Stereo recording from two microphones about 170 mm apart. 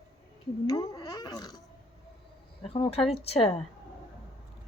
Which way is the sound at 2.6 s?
35° left (ahead or behind).